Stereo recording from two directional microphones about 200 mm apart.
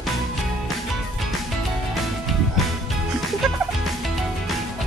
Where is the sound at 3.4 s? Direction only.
Centre (ahead or behind).